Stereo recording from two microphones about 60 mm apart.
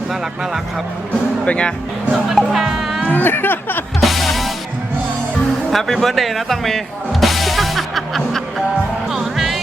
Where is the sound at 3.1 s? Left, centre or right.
Left.